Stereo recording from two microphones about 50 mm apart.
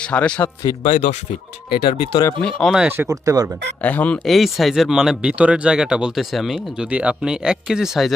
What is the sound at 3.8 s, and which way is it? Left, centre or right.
Speech, left.